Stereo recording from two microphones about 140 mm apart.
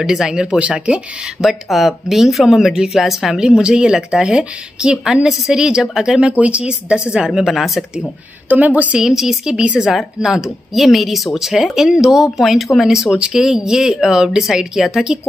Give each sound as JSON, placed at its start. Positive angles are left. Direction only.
{"t": 0.0, "sound": "speech", "side_deg": -5}
{"t": 8.5, "sound": "speech", "side_deg": -10}